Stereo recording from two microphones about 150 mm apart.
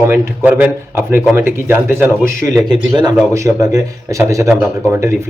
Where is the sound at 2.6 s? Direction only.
30° right (ahead or behind).